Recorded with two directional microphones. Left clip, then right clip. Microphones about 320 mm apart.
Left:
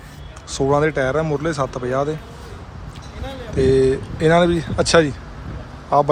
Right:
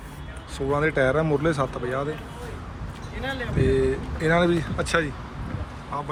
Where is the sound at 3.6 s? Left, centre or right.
Centre.